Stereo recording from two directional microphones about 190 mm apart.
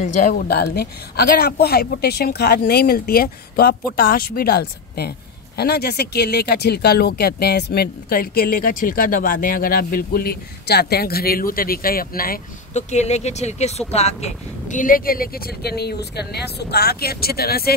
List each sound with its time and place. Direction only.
0.0 s a woman's voice: 45° left (ahead or behind)